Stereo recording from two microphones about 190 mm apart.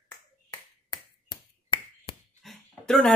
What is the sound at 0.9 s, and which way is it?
Finger snapping, 25° left (ahead or behind).